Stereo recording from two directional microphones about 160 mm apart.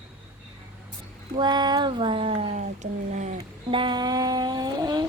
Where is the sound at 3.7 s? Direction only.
30° right (ahead or behind).